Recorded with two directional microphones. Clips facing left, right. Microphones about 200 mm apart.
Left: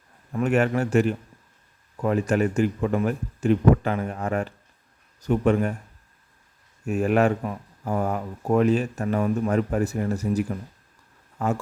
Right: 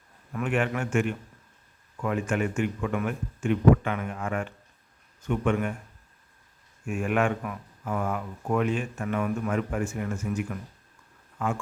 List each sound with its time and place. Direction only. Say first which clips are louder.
0.3 s speech: left 6 dB; 40° left (ahead or behind)
6.8 s speech: left 5 dB; 40° left (ahead or behind)